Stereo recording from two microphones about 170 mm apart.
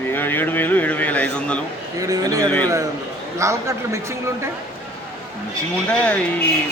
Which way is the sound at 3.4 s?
15° right (ahead or behind).